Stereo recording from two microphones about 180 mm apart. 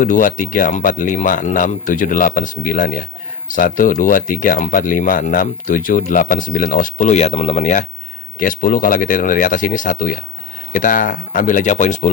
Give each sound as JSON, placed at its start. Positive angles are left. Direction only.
{"t": 0.0, "sound": "speech", "side_deg": 50}